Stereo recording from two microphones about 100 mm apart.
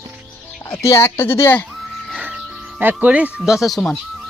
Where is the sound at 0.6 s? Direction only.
30° left (ahead or behind).